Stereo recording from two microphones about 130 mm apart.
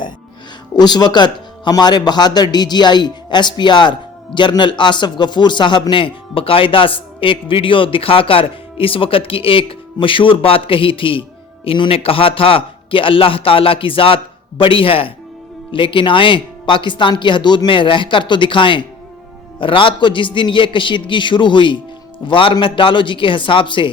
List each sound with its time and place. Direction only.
0.8 s a man's voice: 30° left (ahead or behind)